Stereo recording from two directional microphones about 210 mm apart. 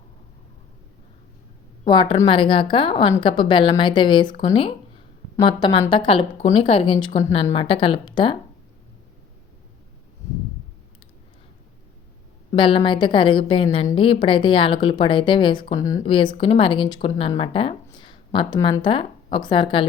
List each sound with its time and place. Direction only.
1.8 s a woman's voice: 20° left (ahead or behind)
12.5 s a woman's voice: 25° left (ahead or behind)